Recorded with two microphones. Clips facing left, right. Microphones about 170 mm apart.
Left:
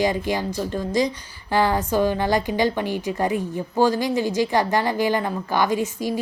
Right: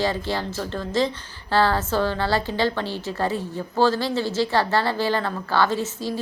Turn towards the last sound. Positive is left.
turn(degrees=15)  # may be behind; listen again after turning